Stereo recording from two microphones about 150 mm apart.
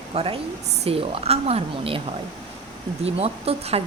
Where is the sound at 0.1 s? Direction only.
40° right (ahead or behind).